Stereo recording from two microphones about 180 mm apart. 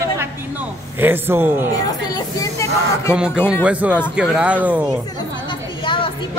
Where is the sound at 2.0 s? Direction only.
20° left (ahead or behind).